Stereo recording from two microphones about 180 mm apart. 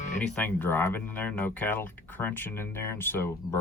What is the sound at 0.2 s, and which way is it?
Speech, 10° left (ahead or behind).